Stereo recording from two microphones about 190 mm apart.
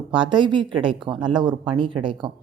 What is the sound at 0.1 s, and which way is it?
Speech, 25° right (ahead or behind).